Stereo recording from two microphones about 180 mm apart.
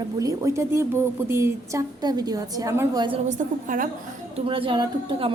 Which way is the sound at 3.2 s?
45° right (ahead or behind).